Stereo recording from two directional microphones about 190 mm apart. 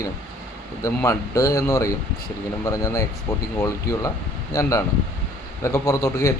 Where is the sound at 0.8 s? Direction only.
15° left (ahead or behind).